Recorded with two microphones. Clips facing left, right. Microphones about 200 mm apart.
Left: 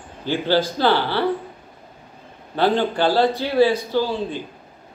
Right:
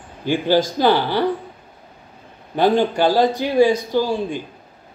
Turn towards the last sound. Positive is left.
turn(degrees=-15)  # may be behind; listen again after turning